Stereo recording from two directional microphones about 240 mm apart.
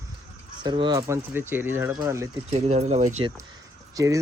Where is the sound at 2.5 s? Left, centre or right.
Right.